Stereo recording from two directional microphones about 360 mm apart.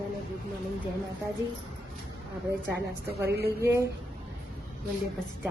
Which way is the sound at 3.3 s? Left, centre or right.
Right.